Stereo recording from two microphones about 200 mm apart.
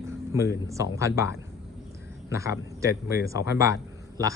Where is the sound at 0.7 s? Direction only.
15° right (ahead or behind).